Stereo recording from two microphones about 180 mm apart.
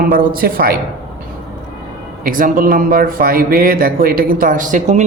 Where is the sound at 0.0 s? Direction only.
55° right (ahead or behind).